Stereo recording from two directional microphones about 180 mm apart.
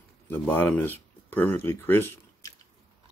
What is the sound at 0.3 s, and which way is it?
Speech, 10° left (ahead or behind).